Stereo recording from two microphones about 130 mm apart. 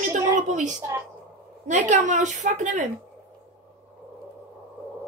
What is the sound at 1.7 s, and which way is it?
Speech, 70° right (ahead or behind).